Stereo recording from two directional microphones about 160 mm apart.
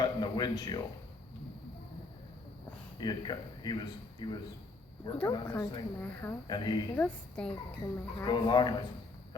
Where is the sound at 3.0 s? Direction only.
25° left (ahead or behind).